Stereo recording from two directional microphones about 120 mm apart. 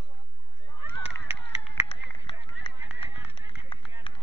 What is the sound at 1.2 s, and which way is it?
Run, 55° left (ahead or behind).